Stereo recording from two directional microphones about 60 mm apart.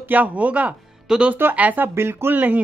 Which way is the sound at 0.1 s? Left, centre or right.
Right.